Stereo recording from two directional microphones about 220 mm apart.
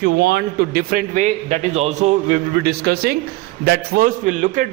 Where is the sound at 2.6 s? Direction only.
45° right (ahead or behind).